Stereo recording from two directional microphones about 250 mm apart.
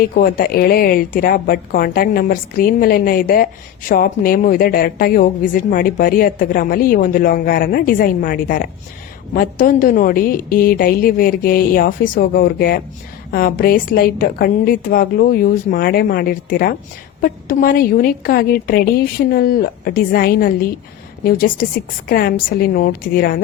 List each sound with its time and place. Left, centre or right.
0.0 s a woman's voice: left